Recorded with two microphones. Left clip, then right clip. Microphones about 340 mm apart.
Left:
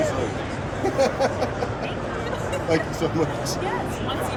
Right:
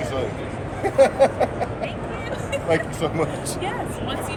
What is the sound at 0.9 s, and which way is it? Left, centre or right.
Speech, centre.